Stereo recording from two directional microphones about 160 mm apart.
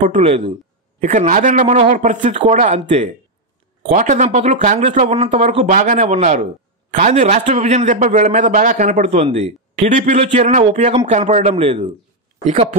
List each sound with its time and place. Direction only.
0.0 s a man's voice: 45° right (ahead or behind)